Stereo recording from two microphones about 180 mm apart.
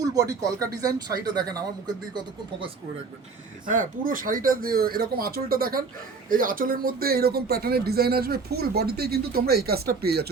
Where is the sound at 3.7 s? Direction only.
45° right (ahead or behind).